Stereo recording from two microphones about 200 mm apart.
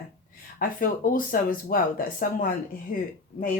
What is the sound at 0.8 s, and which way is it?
Speech, 45° left (ahead or behind).